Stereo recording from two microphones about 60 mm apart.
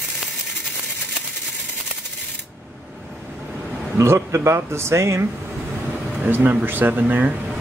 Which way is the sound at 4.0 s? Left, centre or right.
Right.